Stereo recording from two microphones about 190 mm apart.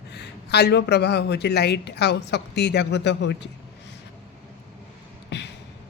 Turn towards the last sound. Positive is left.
turn(degrees=65)  # may be behind; listen again after turning